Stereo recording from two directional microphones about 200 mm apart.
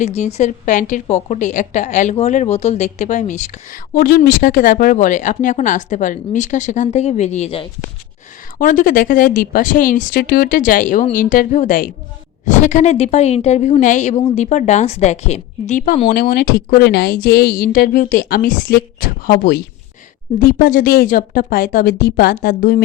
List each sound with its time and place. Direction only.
0.0 s a woman's voice: 35° left (ahead or behind)
8.5 s a woman's voice: 45° left (ahead or behind)